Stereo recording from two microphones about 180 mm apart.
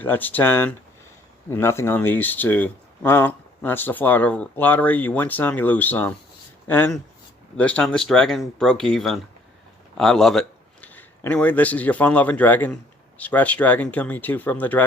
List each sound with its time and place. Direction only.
0.0 s speech: 10° left (ahead or behind)